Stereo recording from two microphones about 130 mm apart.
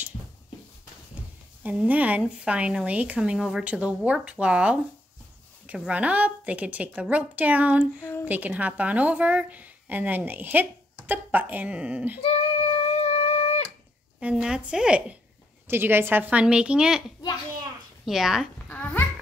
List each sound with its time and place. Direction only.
1.1 s a woman's voice: 10° right (ahead or behind)
8.0 s speech: 20° left (ahead or behind)
8.3 s a woman's voice: 10° right (ahead or behind)
12.2 s a sound: 50° left (ahead or behind)
14.2 s a woman's voice: 5° right (ahead or behind)
18.0 s speech: 5° right (ahead or behind)
18.7 s babbling: 10° left (ahead or behind)